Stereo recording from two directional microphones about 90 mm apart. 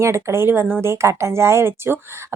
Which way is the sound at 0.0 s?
30° right (ahead or behind).